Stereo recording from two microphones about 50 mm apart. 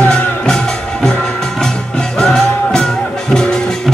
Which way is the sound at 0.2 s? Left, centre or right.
Centre.